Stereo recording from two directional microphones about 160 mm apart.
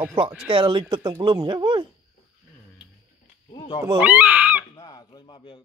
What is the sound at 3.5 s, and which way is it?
Speech, 25° left (ahead or behind).